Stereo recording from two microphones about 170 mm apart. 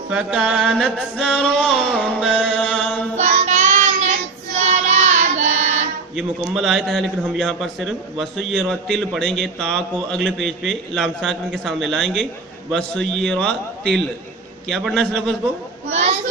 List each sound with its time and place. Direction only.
0.1 s a man's voice: 5° right (ahead or behind)
2.5 s mantra: 5° left (ahead or behind)
3.2 s child singing: 45° right (ahead or behind)
6.1 s a man's voice: 5° right (ahead or behind)
15.9 s a sound: 40° right (ahead or behind)